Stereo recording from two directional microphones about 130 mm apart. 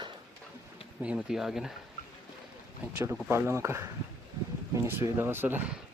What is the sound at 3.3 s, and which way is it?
Speech, 20° right (ahead or behind).